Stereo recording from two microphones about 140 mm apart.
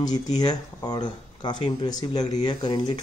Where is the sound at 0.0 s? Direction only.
30° left (ahead or behind).